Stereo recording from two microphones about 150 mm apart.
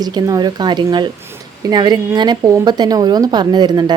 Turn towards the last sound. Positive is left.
turn(degrees=-30)  # may be behind; listen again after turning